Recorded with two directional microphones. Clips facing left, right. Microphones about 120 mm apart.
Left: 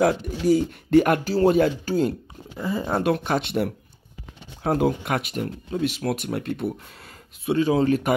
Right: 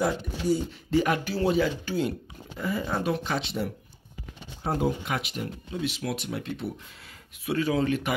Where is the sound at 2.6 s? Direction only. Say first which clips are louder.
Left 3 dB; 25° left (ahead or behind).